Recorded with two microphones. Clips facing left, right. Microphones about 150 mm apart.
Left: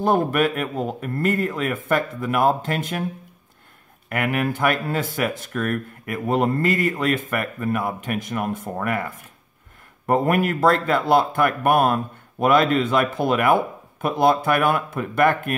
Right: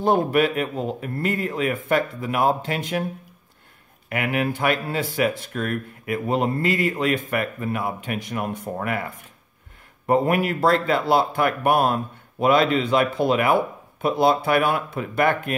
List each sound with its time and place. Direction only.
0.0 s speech: 50° left (ahead or behind)
4.1 s speech: 50° left (ahead or behind)
10.0 s speech: 50° left (ahead or behind)